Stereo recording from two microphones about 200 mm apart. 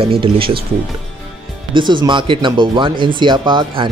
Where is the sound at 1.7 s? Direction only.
25° right (ahead or behind).